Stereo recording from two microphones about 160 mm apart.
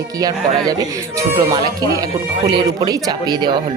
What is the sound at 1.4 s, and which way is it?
Speech, 25° right (ahead or behind).